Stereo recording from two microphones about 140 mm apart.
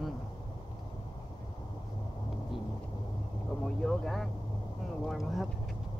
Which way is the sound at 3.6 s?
5° left (ahead or behind).